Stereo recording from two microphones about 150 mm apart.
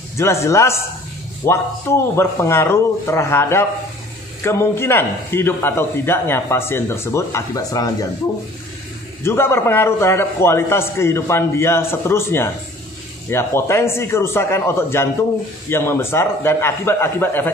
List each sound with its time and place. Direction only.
0.2 s a man's voice: 20° left (ahead or behind)
9.2 s a man's voice: 15° left (ahead or behind)